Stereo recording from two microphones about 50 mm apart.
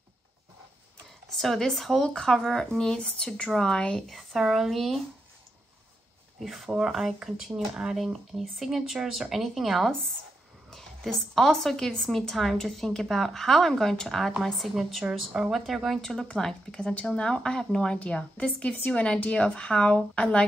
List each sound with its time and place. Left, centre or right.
1.3 s speech: centre
4.1 s a woman's voice: centre
6.4 s a woman's voice: centre
10.7 s a woman's voice: centre
16.0 s a woman's voice: centre